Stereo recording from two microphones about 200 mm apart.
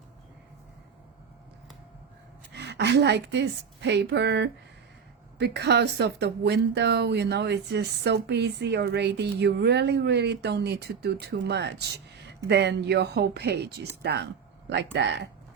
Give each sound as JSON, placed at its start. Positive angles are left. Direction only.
{"t": 2.6, "sound": "a woman's voice", "side_deg": -60}